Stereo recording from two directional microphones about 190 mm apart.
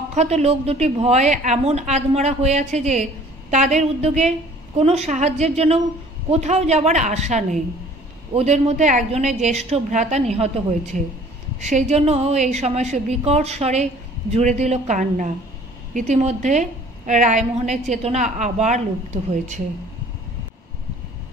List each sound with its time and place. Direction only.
0.1 s a woman's voice: 35° right (ahead or behind)